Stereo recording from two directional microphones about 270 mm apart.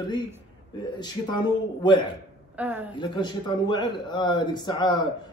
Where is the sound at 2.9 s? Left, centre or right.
Centre.